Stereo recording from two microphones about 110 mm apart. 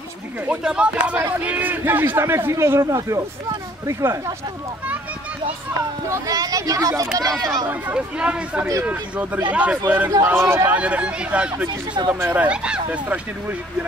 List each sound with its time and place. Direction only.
0.5 s a man's voice: 10° right (ahead or behind); by 4.2 s 30° right (ahead or behind)
6.0 s speech: 30° right (ahead or behind)
7.6 s a man's voice: 10° right (ahead or behind)
10.7 s speech: 10° right (ahead or behind)